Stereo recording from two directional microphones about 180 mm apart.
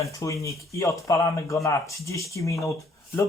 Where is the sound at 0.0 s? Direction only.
15° left (ahead or behind).